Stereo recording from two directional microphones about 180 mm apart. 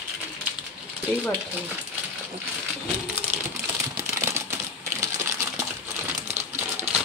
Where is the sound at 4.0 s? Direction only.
15° right (ahead or behind).